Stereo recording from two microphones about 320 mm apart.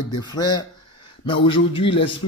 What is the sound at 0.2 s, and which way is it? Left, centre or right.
Speech, centre.